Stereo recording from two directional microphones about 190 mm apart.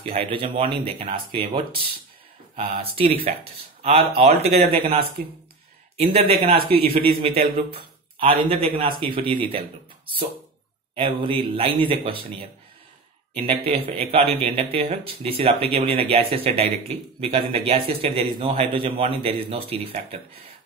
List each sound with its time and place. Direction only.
0.2 s a man's voice: 30° right (ahead or behind)
5.9 s a man's voice: 30° right (ahead or behind)
13.7 s a man's voice: 30° right (ahead or behind)